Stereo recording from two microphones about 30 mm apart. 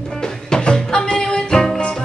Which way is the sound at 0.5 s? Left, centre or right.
Left.